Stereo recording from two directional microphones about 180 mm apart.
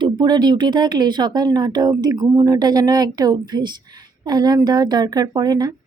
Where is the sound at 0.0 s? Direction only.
25° right (ahead or behind).